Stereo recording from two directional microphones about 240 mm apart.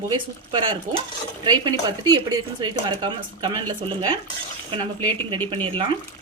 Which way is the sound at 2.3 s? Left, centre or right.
Centre.